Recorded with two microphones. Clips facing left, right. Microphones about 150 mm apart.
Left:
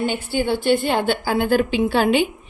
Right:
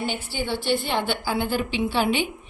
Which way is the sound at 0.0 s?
50° left (ahead or behind).